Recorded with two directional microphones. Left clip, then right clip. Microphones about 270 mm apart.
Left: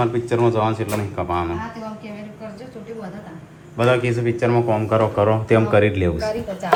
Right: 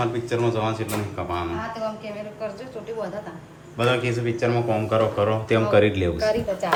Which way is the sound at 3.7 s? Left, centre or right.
Centre.